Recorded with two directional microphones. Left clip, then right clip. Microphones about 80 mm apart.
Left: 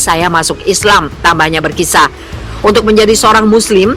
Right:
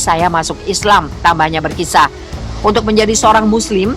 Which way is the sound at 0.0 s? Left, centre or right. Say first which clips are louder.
Left 2 dB; left.